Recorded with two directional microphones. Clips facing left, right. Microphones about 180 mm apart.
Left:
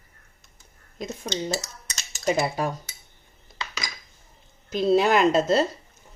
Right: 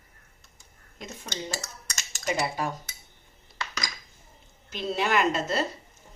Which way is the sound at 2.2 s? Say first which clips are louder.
Left 5 dB; 40° left (ahead or behind).